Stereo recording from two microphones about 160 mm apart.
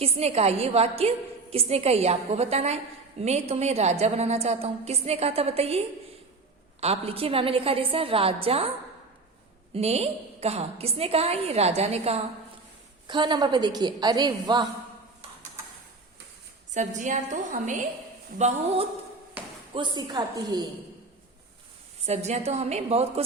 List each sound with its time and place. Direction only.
0.0 s a woman's voice: 40° right (ahead or behind)
9.7 s a woman's voice: 40° right (ahead or behind)
13.1 s a woman's voice: 30° right (ahead or behind)
16.7 s a woman's voice: 50° right (ahead or behind)
19.7 s a woman's voice: 30° right (ahead or behind)
22.0 s a woman's voice: 45° right (ahead or behind)